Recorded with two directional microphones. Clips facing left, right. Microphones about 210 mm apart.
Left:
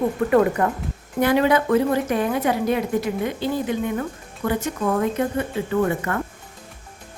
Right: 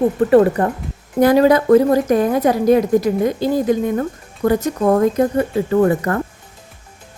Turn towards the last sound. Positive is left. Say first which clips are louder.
# right 6 dB
turn(degrees=-40)  # may be behind; listen again after turning